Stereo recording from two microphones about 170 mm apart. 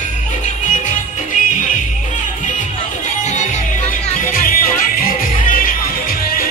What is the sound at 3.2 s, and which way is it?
Music, 45° left (ahead or behind).